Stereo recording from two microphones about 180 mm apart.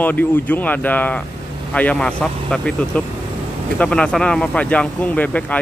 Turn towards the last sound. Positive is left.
turn(degrees=10)  # may be behind; listen again after turning